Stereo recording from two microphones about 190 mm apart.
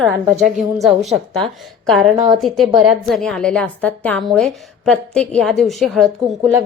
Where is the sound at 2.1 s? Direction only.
20° right (ahead or behind).